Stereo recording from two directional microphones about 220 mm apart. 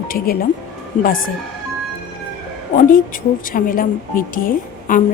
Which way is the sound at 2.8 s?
35° left (ahead or behind).